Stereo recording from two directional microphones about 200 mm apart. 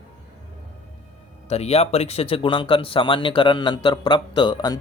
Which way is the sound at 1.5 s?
30° left (ahead or behind).